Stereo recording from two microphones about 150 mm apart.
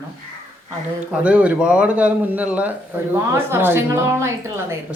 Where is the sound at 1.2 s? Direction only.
10° right (ahead or behind).